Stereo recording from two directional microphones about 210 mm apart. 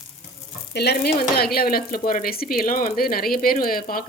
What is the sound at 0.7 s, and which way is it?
Speech, 50° left (ahead or behind).